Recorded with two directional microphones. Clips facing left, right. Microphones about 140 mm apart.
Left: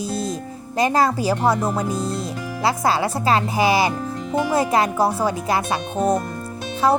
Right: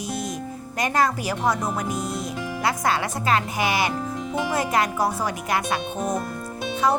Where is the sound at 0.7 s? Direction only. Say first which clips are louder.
Left 4 dB; 30° left (ahead or behind).